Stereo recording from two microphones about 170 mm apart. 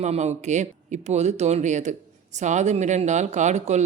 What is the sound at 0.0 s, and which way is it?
Speech, 40° right (ahead or behind).